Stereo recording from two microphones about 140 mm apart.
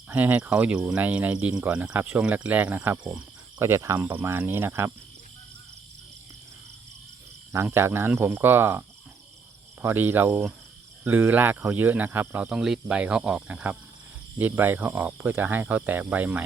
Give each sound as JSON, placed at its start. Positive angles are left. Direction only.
{"t": 0.1, "sound": "speech", "side_deg": -10}
{"t": 3.6, "sound": "speech", "side_deg": -20}
{"t": 7.5, "sound": "speech", "side_deg": -20}
{"t": 9.8, "sound": "speech", "side_deg": -15}